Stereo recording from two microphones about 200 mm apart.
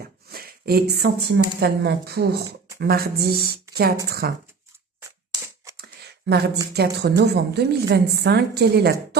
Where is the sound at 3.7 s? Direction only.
50° right (ahead or behind).